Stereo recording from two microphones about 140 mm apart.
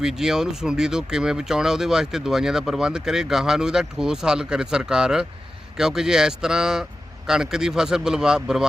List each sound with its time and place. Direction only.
0.0 s speech: 5° right (ahead or behind)